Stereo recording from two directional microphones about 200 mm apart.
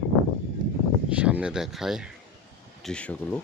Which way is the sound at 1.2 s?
5° right (ahead or behind).